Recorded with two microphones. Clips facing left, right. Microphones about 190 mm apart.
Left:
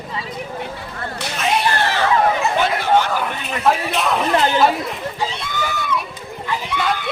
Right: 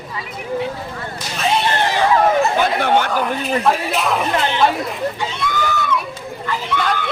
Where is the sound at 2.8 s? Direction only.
60° right (ahead or behind).